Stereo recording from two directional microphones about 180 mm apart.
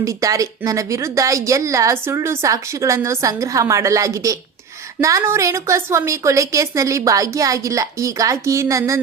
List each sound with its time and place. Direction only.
0.0 s a woman's voice: 20° right (ahead or behind)